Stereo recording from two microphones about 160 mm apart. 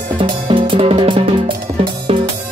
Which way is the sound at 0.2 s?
30° right (ahead or behind).